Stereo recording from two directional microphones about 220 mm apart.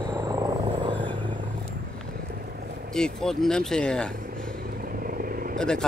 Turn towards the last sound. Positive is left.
turn(degrees=5)  # may be behind; listen again after turning